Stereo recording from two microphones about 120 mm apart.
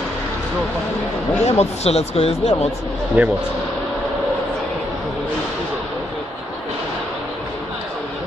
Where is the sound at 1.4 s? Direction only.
60° left (ahead or behind).